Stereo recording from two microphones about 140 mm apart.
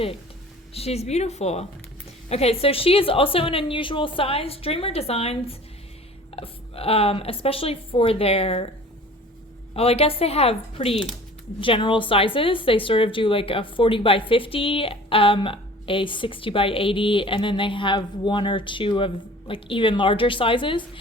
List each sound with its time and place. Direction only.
0.7 s a woman's voice: 45° left (ahead or behind)
9.7 s a woman's voice: 45° left (ahead or behind)